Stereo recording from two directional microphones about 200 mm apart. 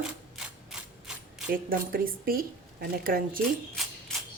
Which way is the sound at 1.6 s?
45° right (ahead or behind).